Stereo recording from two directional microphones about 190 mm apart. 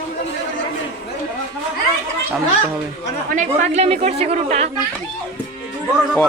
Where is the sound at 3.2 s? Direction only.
40° right (ahead or behind).